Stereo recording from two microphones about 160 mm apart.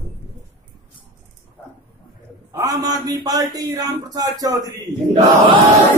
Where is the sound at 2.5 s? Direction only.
20° right (ahead or behind).